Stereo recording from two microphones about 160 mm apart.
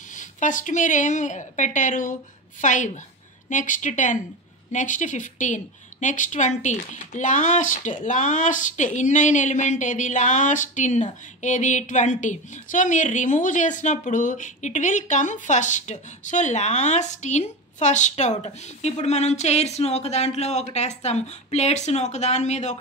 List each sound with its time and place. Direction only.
0.1 s a woman's voice: 50° left (ahead or behind)